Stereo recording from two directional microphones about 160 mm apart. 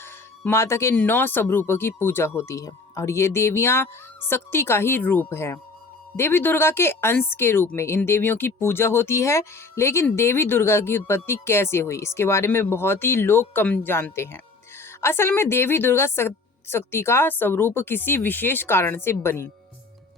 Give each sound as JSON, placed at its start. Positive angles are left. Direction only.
{"t": 0.0, "sound": "speech", "side_deg": 15}